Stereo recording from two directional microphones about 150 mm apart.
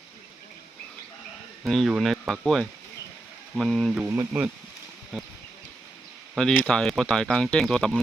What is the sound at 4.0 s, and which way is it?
Speech, 20° right (ahead or behind).